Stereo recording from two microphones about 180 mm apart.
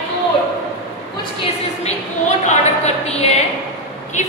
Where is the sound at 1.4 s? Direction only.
40° left (ahead or behind).